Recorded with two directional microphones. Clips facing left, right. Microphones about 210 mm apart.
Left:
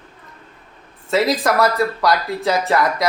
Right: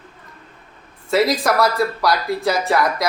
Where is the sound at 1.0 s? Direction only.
Centre (ahead or behind).